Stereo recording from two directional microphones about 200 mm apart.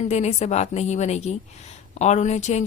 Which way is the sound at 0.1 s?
35° left (ahead or behind).